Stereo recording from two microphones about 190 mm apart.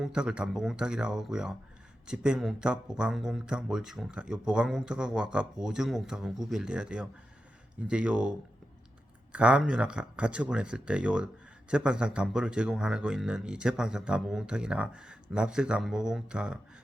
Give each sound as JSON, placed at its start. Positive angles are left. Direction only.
{"t": 0.0, "sound": "speech", "side_deg": -5}